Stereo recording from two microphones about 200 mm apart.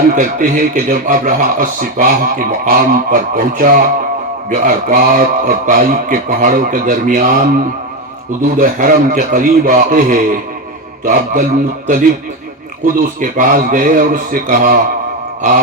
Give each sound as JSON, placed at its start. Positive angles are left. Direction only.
{"t": 0.2, "sound": "speech", "side_deg": -40}
{"t": 8.5, "sound": "a man's voice", "side_deg": -45}
{"t": 12.8, "sound": "a man's voice", "side_deg": -40}